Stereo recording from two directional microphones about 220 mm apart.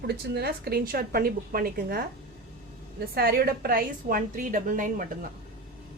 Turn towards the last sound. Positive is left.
turn(degrees=-40)  # may be behind; listen again after turning